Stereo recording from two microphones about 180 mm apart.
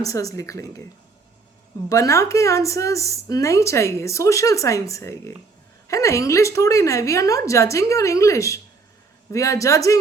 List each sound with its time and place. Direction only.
0.1 s a woman's voice: 20° left (ahead or behind)
1.9 s a woman's voice: 15° left (ahead or behind)